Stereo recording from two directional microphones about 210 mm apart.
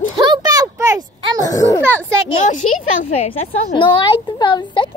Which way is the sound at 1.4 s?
15° left (ahead or behind).